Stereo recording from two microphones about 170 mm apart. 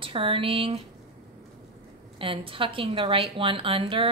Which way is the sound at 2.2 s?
30° right (ahead or behind).